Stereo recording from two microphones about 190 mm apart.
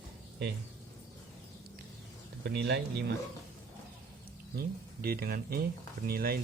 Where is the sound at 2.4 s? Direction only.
60° right (ahead or behind).